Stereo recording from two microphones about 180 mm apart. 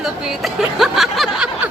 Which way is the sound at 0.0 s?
Centre (ahead or behind).